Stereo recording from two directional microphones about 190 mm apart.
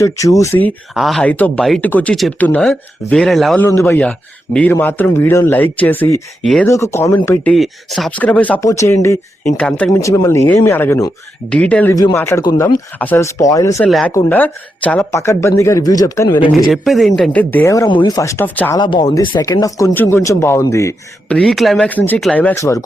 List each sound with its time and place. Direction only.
0.0 s speech: 15° left (ahead or behind)
0.9 s speech: centre (ahead or behind)
3.7 s speech: 15° left (ahead or behind)
6.4 s speech: centre (ahead or behind)
6.7 s speech: 15° left (ahead or behind)
7.5 s speech: centre (ahead or behind); by 13.8 s 15° left (ahead or behind)
13.8 s speech: centre (ahead or behind)
14.1 s speech: 10° left (ahead or behind)
16.6 s speech: centre (ahead or behind)
18.8 s speech: 25° left (ahead or behind)